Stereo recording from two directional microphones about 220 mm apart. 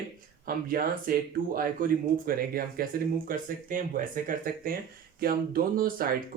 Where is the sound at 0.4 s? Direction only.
40° right (ahead or behind).